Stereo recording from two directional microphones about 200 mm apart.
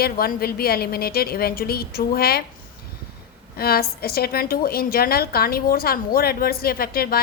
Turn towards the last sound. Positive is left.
turn(degrees=50)  # may be behind; listen again after turning